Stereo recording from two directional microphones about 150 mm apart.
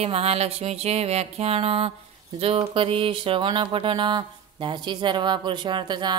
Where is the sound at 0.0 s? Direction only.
40° right (ahead or behind).